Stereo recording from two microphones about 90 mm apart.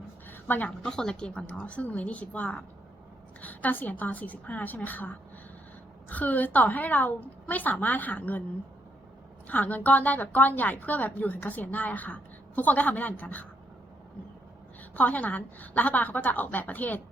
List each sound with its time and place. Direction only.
0.3 s a sound: 20° left (ahead or behind)
0.9 s a woman's voice: 5° left (ahead or behind)
9.5 s a woman's voice: 15° left (ahead or behind)
14.9 s a woman's voice: 15° left (ahead or behind)